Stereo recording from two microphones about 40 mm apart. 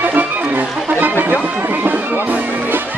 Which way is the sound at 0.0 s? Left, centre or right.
Right.